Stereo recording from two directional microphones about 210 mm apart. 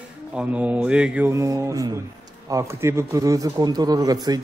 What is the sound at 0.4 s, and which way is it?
A man's voice, 5° right (ahead or behind).